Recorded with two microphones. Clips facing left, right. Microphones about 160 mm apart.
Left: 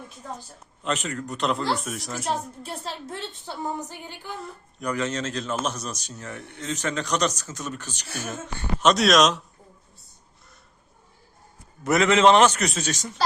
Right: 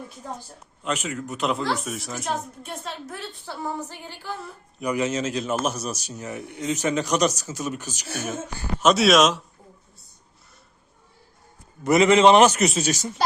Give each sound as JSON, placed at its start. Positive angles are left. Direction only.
{"t": 0.8, "sound": "speech", "side_deg": 0}
{"t": 2.3, "sound": "a woman's voice", "side_deg": 30}
{"t": 4.4, "sound": "speech", "side_deg": -10}
{"t": 11.8, "sound": "speech", "side_deg": 0}